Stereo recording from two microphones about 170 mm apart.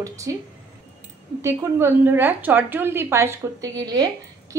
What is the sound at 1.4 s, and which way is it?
A woman's voice, 15° right (ahead or behind).